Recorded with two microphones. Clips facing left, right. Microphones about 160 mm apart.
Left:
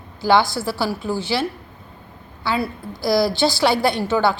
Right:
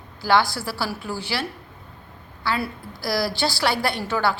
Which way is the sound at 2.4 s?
20° left (ahead or behind).